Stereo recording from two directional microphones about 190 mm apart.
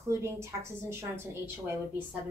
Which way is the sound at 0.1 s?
15° right (ahead or behind).